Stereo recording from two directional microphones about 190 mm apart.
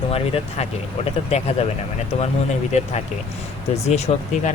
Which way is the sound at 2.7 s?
35° left (ahead or behind).